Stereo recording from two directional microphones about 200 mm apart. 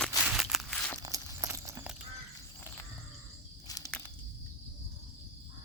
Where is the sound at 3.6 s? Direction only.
20° left (ahead or behind).